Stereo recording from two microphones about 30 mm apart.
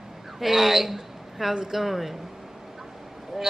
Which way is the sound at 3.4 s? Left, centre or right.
Centre.